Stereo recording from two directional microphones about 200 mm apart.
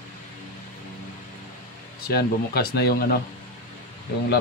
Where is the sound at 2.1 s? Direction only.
55° left (ahead or behind).